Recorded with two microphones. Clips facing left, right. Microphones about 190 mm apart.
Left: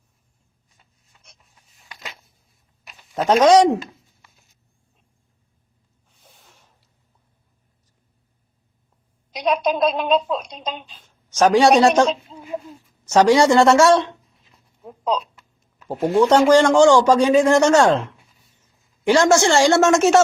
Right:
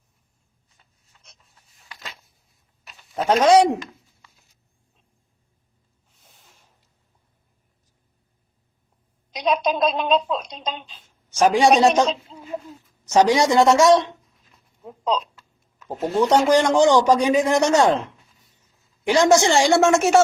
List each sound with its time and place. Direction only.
1.1 s a sound: 10° left (ahead or behind)
3.4 s speech: 10° right (ahead or behind)
9.3 s a woman's voice: 10° left (ahead or behind)
11.3 s speech: 15° right (ahead or behind)
12.2 s a sound: 25° left (ahead or behind)
13.1 s speech: 15° right (ahead or behind)
14.8 s a sound: 10° left (ahead or behind)
15.9 s a woman's voice: 10° left (ahead or behind)
16.2 s speech: 15° right (ahead or behind)
19.0 s speech: 15° right (ahead or behind)